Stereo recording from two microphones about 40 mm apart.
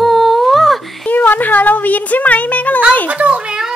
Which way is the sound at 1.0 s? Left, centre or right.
Left.